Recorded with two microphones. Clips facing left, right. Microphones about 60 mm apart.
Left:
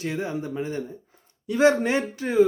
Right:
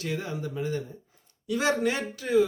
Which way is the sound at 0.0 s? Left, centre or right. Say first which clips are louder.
Left 4 dB; left.